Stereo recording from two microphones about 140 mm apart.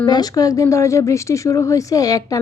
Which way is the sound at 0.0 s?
30° left (ahead or behind).